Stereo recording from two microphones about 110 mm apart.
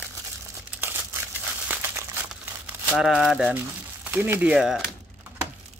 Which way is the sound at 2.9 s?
5° right (ahead or behind).